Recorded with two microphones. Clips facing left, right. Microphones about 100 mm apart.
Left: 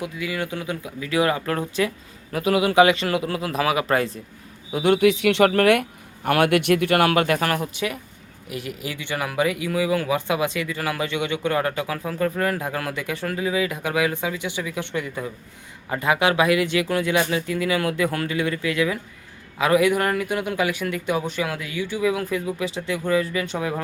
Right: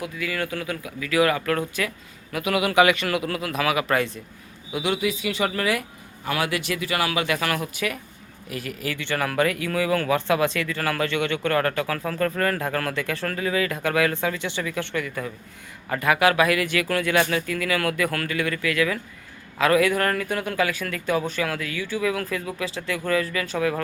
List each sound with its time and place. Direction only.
0.0 s speech: 20° left (ahead or behind)
4.7 s speech: 45° left (ahead or behind)
4.9 s speech: 70° left (ahead or behind); by 23.8 s 20° left (ahead or behind)